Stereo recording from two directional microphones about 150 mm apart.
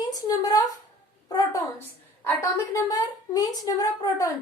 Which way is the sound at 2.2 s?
20° left (ahead or behind).